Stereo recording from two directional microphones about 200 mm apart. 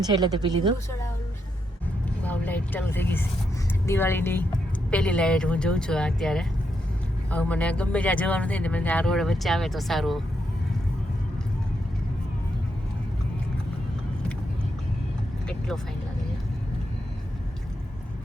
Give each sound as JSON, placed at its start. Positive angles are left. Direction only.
{"t": 0.0, "sound": "speech", "side_deg": -20}
{"t": 2.2, "sound": "speech", "side_deg": 10}
{"t": 15.4, "sound": "vehicle", "side_deg": 5}